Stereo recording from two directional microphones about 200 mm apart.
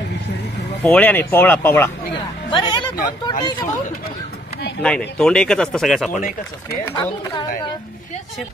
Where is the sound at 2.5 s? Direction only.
25° left (ahead or behind).